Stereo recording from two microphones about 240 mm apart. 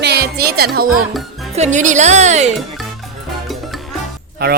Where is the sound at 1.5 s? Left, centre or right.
Right.